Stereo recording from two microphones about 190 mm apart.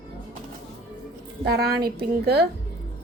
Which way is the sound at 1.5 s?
55° right (ahead or behind).